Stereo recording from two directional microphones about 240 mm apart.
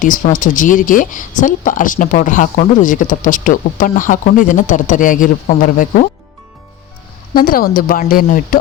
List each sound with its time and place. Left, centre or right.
0.0 s speech: left
7.3 s speech: left